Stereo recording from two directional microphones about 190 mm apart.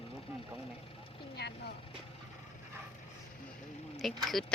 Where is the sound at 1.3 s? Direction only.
60° left (ahead or behind).